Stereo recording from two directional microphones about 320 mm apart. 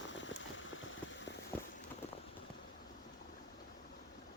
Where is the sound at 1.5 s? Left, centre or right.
Centre.